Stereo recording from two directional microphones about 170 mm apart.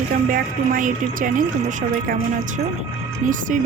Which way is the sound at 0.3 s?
55° right (ahead or behind).